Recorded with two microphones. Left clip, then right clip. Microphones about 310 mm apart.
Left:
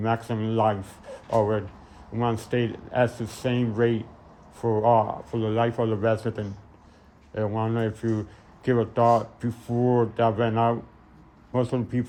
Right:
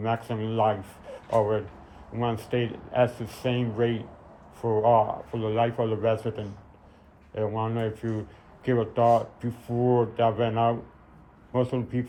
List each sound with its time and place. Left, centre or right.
0.0 s speech: left